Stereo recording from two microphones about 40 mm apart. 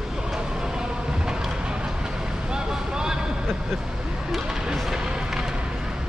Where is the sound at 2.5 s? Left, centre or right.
Centre.